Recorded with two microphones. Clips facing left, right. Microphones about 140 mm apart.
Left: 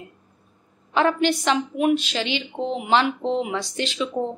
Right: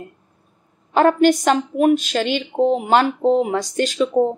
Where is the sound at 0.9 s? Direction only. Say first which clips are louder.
Right 6 dB; 45° right (ahead or behind).